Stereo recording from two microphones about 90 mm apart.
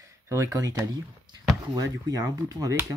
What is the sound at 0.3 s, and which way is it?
Speech, 40° right (ahead or behind).